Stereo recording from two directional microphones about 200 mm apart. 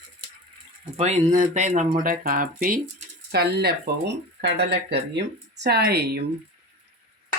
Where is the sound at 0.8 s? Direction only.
30° right (ahead or behind).